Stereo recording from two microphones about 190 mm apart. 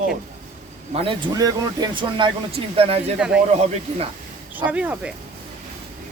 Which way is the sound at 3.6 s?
30° right (ahead or behind).